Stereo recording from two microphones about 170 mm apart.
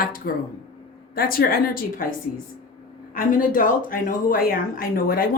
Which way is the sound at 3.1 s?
55° left (ahead or behind).